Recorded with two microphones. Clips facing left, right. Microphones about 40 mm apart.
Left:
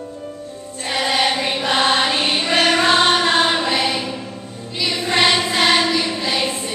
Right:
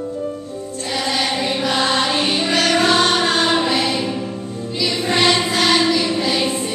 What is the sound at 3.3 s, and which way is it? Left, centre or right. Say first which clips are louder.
Choir: even; centre.